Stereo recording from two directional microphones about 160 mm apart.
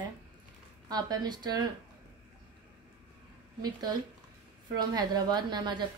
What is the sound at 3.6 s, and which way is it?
A woman's voice, 25° right (ahead or behind).